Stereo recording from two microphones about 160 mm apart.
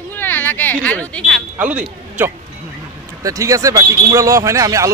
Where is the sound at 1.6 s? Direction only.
10° right (ahead or behind).